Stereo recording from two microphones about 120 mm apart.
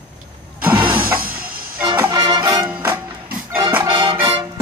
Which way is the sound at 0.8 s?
45° right (ahead or behind).